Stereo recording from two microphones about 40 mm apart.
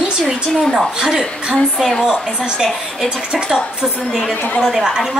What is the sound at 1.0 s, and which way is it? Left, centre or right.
A woman's voice, centre.